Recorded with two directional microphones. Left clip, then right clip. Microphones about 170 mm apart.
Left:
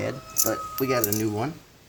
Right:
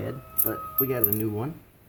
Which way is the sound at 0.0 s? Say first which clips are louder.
Left 7 dB; 20° left (ahead or behind).